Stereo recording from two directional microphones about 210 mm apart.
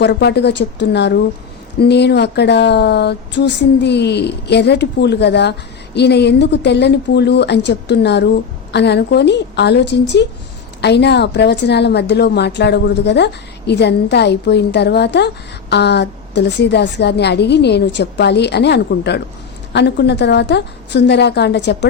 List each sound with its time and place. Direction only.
0.0 s speech: 55° left (ahead or behind)